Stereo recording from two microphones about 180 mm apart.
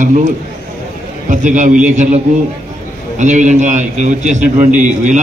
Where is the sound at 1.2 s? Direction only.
45° right (ahead or behind).